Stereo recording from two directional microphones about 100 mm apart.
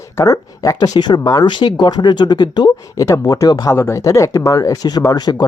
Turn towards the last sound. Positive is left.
turn(degrees=40)  # may be behind; listen again after turning